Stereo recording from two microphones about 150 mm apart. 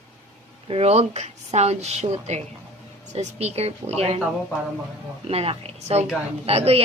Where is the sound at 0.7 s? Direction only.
45° right (ahead or behind).